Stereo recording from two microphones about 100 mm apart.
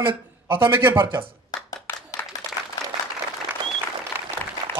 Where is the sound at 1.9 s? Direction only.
20° left (ahead or behind).